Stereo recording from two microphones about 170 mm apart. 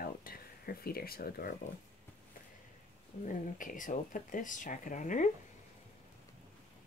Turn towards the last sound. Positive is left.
turn(degrees=50)  # may be behind; listen again after turning